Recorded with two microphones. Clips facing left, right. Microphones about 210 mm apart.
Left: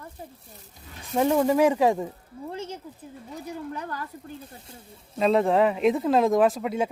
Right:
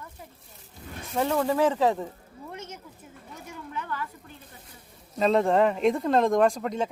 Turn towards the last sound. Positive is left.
turn(degrees=5)  # may be behind; listen again after turning